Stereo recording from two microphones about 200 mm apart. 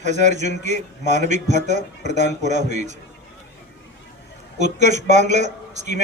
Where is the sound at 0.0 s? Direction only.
35° right (ahead or behind).